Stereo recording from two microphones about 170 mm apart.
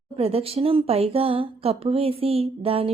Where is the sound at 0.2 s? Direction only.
35° right (ahead or behind).